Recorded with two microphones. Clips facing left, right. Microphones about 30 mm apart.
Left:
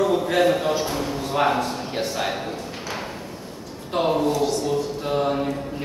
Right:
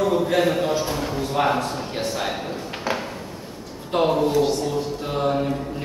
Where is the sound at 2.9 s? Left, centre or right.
Right.